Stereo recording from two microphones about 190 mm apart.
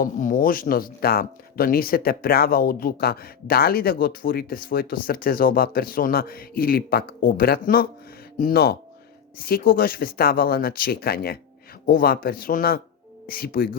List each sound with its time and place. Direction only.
0.0 s speech: 45° left (ahead or behind)